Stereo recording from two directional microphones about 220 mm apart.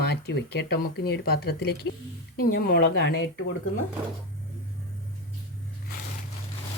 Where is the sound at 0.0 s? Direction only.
50° left (ahead or behind).